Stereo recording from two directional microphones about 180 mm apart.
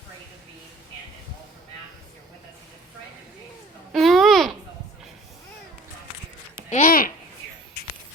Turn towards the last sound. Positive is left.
turn(degrees=50)  # may be behind; listen again after turning